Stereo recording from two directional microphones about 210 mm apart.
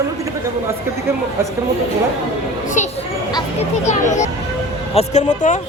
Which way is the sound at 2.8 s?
35° left (ahead or behind).